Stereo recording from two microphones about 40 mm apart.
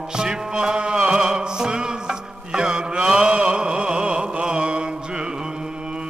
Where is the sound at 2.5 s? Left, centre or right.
Right.